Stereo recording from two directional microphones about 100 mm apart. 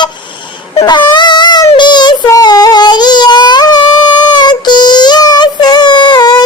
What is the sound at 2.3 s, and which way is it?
Female singing, 40° left (ahead or behind).